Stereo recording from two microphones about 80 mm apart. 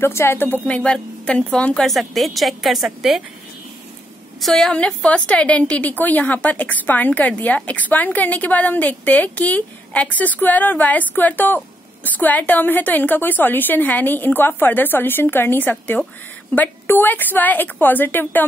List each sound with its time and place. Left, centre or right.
0.0 s a woman's voice: left
0.7 s a woman's voice: centre
1.9 s a woman's voice: centre
4.4 s a woman's voice: centre
4.7 s a woman's voice: centre